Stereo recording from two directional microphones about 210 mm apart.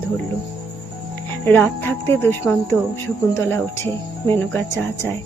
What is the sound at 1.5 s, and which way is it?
Speech, 10° left (ahead or behind).